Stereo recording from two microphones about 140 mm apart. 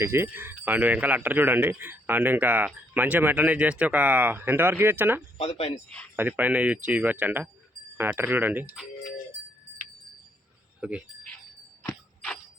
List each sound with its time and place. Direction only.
0.0 s speech: 15° right (ahead or behind)
5.4 s speech: 50° left (ahead or behind)
6.1 s speech: 10° right (ahead or behind)
10.8 s speech: 10° right (ahead or behind)